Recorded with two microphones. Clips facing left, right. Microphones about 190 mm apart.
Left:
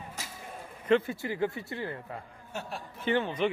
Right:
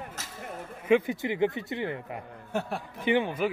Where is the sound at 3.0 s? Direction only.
15° right (ahead or behind).